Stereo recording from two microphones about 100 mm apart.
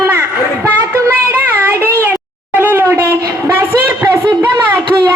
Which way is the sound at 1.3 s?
20° right (ahead or behind).